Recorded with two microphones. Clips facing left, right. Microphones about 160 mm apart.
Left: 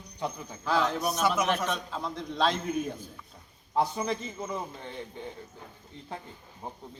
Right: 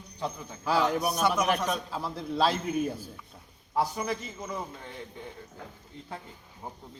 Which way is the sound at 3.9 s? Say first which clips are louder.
Left 1 dB; 25° left (ahead or behind).